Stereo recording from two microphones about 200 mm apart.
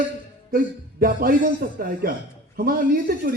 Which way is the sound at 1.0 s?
45° right (ahead or behind).